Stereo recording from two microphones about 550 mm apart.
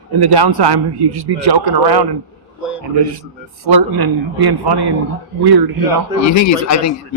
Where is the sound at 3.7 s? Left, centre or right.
Right.